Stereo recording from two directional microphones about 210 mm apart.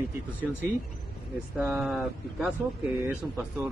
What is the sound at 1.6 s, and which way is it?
A man's voice, 5° right (ahead or behind).